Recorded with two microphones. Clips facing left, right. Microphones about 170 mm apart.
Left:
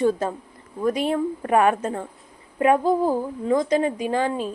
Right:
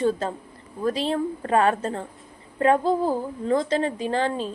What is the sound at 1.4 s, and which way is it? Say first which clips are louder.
Speech: left 2 dB; 15° left (ahead or behind).